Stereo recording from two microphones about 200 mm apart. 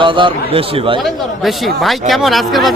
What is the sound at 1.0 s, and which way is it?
Speech, centre (ahead or behind).